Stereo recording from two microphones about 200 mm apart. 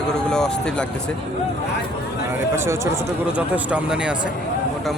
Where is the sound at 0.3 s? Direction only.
5° left (ahead or behind).